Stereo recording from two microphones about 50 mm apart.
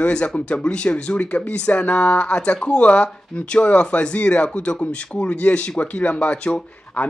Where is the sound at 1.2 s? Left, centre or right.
Left.